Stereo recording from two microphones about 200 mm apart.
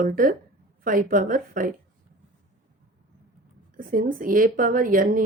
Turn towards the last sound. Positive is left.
turn(degrees=-45)  # may be behind; listen again after turning